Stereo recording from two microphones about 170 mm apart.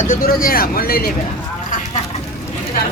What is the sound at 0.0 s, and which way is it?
Speech, 55° left (ahead or behind).